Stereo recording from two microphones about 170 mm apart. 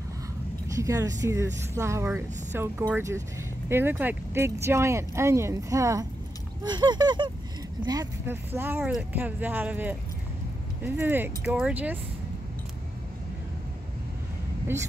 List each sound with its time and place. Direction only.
0.7 s speech: 20° right (ahead or behind)
6.6 s a sound: 25° right (ahead or behind)
7.8 s speech: 20° right (ahead or behind)